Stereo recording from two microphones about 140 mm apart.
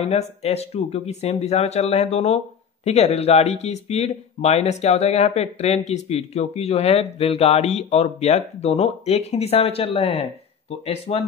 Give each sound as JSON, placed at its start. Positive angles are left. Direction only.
{"t": 0.0, "sound": "speech", "side_deg": 50}